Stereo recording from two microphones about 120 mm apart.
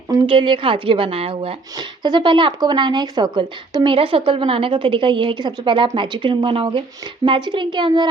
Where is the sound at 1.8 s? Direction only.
40° right (ahead or behind).